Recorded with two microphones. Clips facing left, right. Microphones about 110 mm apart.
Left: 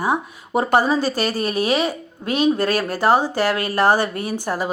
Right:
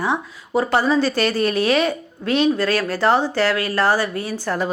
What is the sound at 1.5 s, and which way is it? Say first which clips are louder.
Speech: right 2 dB; 15° left (ahead or behind).